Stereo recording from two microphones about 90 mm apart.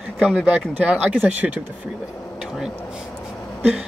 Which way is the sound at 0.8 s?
15° right (ahead or behind).